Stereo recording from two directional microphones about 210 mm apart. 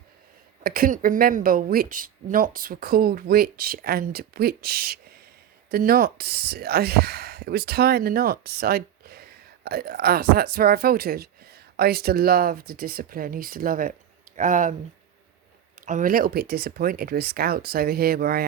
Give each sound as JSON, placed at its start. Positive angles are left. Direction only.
{"t": 0.6, "sound": "speech", "side_deg": -45}
{"t": 15.9, "sound": "speech", "side_deg": -40}